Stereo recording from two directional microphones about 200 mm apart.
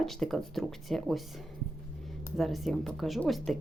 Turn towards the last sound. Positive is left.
turn(degrees=0)  # may be behind; listen again after turning